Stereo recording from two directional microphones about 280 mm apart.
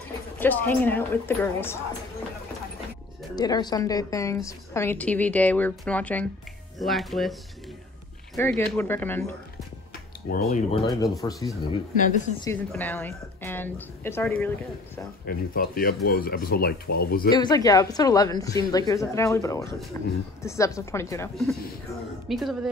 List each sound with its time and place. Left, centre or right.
0.4 s a woman's voice: centre
3.3 s a woman's voice: centre
8.4 s a woman's voice: centre
10.3 s a woman's voice: left; by 14.5 s centre
15.2 s speech: left
17.3 s a woman's voice: centre